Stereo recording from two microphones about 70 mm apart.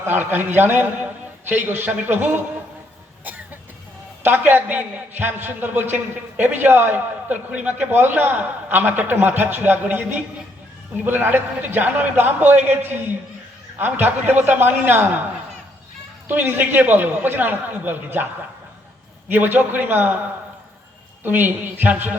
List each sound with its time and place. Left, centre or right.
0.0 s a man's voice: right
3.2 s cough: right
4.2 s a man's voice: right
16.3 s a man's voice: right
19.3 s a man's voice: right
21.2 s a man's voice: right